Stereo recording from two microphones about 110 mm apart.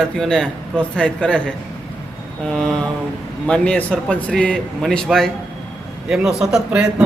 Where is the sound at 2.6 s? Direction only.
5° left (ahead or behind).